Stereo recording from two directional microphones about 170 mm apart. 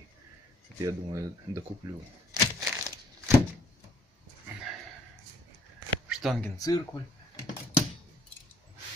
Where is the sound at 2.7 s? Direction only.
20° right (ahead or behind).